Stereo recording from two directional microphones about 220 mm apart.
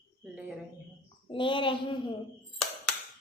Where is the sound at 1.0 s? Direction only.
25° left (ahead or behind).